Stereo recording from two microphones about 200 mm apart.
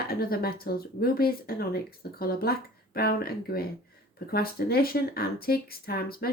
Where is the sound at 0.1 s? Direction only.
50° left (ahead or behind).